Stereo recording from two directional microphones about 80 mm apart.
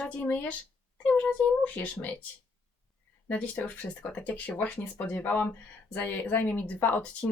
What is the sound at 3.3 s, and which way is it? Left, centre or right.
Speech, centre.